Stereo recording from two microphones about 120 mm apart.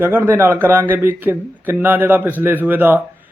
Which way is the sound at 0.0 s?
20° right (ahead or behind).